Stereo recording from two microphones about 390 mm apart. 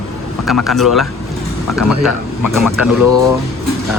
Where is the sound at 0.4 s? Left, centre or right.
Centre.